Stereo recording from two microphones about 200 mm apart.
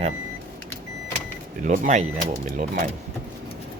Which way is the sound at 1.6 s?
35° right (ahead or behind).